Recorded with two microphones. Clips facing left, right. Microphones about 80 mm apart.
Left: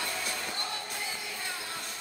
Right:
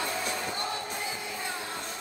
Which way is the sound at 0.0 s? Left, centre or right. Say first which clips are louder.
Right 4 dB; centre.